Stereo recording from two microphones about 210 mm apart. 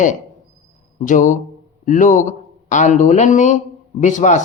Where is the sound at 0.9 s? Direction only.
35° left (ahead or behind).